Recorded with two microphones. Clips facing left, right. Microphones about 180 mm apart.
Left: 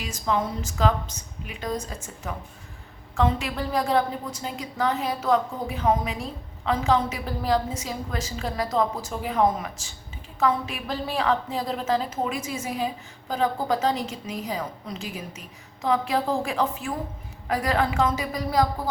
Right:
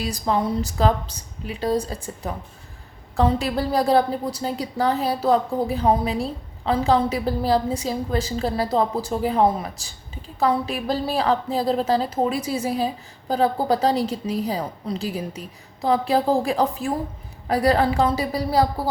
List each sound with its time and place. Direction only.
0.0 s a woman's voice: 35° right (ahead or behind)